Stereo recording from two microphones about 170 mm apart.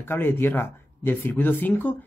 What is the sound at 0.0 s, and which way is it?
Speech, 10° left (ahead or behind).